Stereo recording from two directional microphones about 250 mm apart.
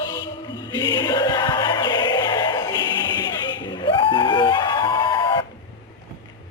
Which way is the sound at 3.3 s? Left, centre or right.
Centre.